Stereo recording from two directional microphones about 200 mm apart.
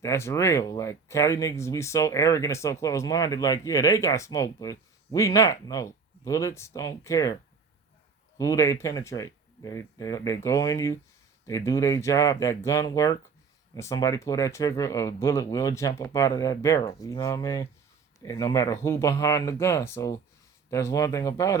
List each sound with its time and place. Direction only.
0.0 s speech: 15° left (ahead or behind)
8.4 s speech: 15° left (ahead or behind)